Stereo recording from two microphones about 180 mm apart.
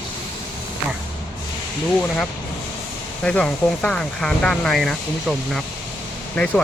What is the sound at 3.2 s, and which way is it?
Speech, 5° left (ahead or behind).